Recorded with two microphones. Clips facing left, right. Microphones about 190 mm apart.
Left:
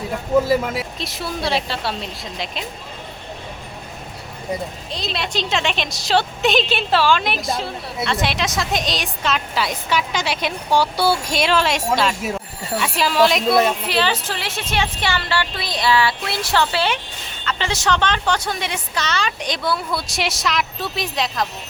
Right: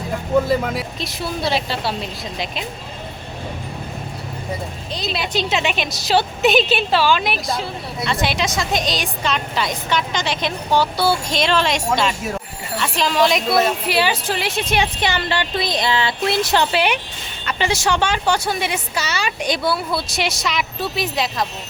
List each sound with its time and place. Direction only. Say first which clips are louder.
0.4 s a woman's voice: even; 5° left (ahead or behind)
4.9 s a woman's voice: right 3 dB; centre (ahead or behind)
13.8 s a woman's voice: right 2 dB; 10° right (ahead or behind)